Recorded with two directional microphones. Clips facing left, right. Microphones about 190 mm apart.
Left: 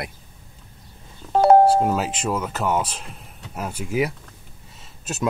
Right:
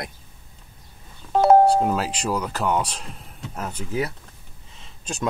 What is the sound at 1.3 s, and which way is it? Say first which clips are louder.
Speech: left 1 dB; centre (ahead or behind).